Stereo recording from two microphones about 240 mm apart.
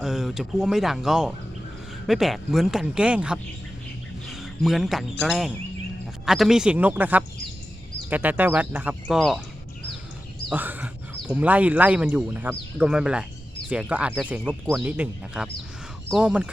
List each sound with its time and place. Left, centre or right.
0.0 s speech: centre
4.3 s a sound: centre
5.2 s speech: centre
10.5 s speech: centre